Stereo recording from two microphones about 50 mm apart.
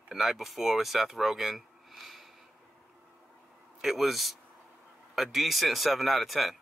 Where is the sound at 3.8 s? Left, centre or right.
Centre.